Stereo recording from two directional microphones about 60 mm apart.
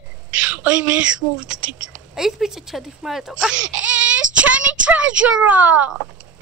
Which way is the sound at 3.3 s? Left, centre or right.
Centre.